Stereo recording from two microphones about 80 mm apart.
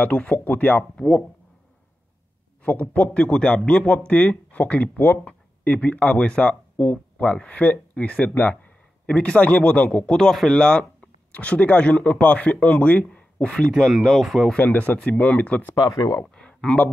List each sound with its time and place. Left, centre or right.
0.0 s speech: centre
0.9 s a man's voice: centre
2.6 s a man's voice: centre
13.8 s speech: centre
14.6 s speech: left
15.7 s speech: left
16.3 s speech: centre